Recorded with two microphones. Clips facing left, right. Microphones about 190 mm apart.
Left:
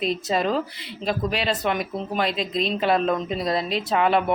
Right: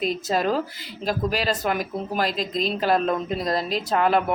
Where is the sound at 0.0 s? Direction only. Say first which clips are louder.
Even; centre (ahead or behind).